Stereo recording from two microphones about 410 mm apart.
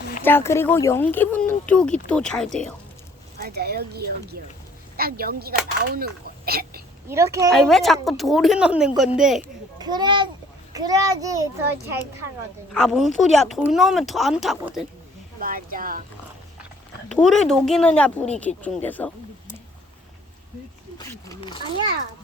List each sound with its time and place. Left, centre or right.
0.2 s speech: centre
3.3 s speech: right
7.1 s a child's voice: centre
12.7 s speech: centre
15.4 s speech: right
17.1 s speech: centre
21.0 s speech: centre